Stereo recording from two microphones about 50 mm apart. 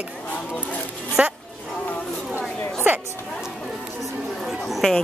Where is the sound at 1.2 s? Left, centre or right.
Right.